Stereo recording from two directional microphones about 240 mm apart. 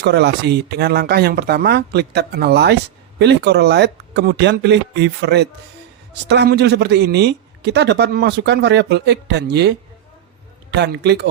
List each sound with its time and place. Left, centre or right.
0.0 s a man's voice: right